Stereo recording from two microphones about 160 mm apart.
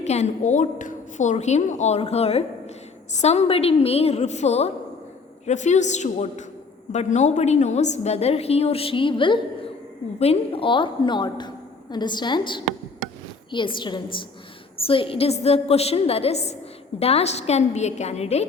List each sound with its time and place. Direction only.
0.0 s a woman's voice: 45° left (ahead or behind)